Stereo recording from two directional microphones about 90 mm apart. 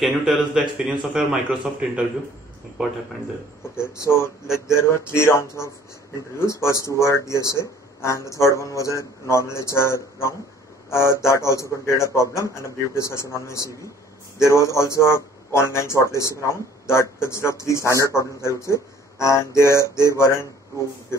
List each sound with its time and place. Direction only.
0.0 s speech: centre (ahead or behind)
0.6 s a man's voice: 15° right (ahead or behind)
3.7 s a man's voice: 30° left (ahead or behind)